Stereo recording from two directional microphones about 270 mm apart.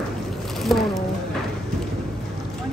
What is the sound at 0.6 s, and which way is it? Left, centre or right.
Speech, centre.